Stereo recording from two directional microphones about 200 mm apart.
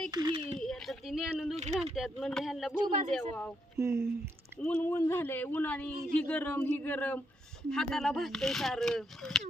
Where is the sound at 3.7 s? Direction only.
15° right (ahead or behind).